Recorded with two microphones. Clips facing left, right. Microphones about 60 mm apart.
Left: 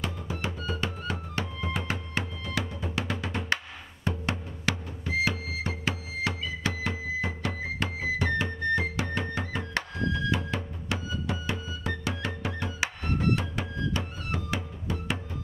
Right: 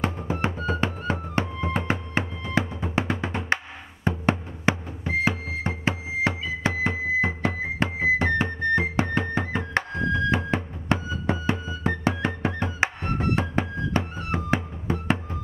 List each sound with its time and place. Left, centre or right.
0.0 s music: right